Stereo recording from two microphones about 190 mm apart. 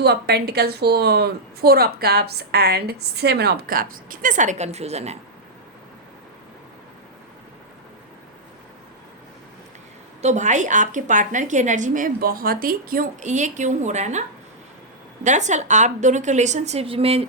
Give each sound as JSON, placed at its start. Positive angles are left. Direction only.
{"t": 0.0, "sound": "a woman's voice", "side_deg": -60}
{"t": 10.2, "sound": "a woman's voice", "side_deg": -35}